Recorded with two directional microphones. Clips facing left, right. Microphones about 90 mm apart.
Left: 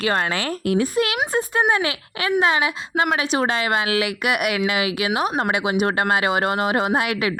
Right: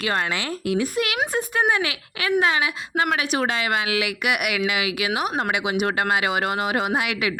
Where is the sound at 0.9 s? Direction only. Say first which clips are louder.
Left 3 dB; 35° left (ahead or behind).